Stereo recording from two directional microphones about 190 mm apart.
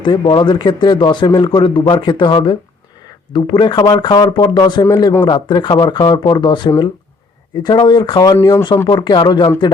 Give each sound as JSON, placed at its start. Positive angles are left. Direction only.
{"t": 0.0, "sound": "speech", "side_deg": 25}